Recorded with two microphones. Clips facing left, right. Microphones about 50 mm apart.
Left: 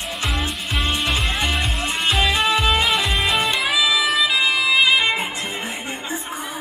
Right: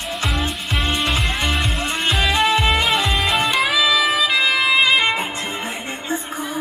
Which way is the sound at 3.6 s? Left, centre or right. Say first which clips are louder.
Right 2 dB; right.